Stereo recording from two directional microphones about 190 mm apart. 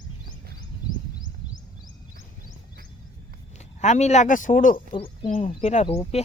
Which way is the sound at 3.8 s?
35° left (ahead or behind).